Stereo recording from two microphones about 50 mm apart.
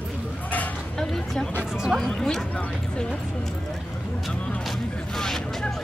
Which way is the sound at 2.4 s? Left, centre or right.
Left.